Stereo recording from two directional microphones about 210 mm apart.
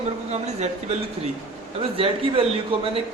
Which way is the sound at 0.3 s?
30° right (ahead or behind).